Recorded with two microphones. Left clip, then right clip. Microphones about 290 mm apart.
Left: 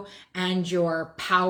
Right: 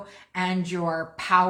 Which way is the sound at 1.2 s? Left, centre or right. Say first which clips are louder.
Right 3 dB; right.